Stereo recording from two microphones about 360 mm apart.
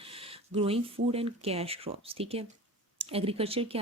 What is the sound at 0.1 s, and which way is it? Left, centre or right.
Speech, centre.